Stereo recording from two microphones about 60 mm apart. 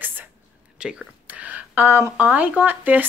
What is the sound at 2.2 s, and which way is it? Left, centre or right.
Speech, right.